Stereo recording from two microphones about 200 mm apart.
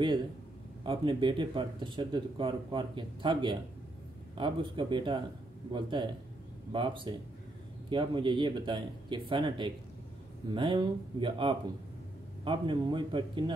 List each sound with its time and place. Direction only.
0.8 s speech: 25° right (ahead or behind)